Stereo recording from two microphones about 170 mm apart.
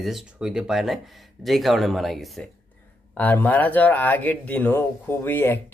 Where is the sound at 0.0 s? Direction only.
Centre (ahead or behind).